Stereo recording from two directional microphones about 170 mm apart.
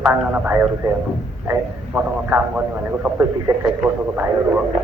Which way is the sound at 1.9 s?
10° right (ahead or behind).